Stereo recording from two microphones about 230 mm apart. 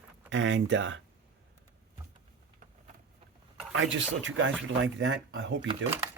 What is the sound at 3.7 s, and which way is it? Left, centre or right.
Speech, right.